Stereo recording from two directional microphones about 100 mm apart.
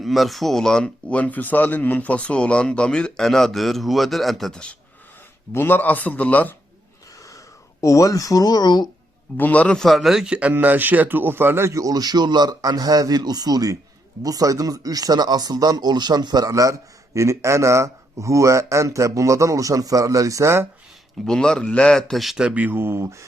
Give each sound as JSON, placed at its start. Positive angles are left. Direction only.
{"t": 0.0, "sound": "speech", "side_deg": 0}
{"t": 5.5, "sound": "speech", "side_deg": 20}
{"t": 7.8, "sound": "speech", "side_deg": 35}
{"t": 9.4, "sound": "speech", "side_deg": 15}
{"t": 21.2, "sound": "speech", "side_deg": 5}